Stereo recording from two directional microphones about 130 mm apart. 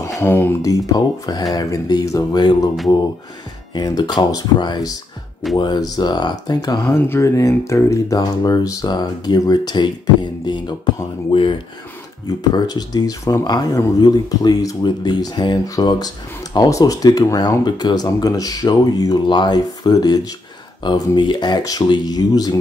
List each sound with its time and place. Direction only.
0.2 s speech: 15° left (ahead or behind)
3.7 s speech: 35° left (ahead or behind)
12.5 s speech: 30° left (ahead or behind)